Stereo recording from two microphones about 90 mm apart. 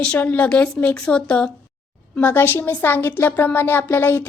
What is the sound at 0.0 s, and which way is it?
Speech, 15° left (ahead or behind).